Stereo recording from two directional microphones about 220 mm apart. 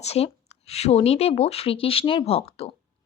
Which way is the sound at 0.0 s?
30° left (ahead or behind).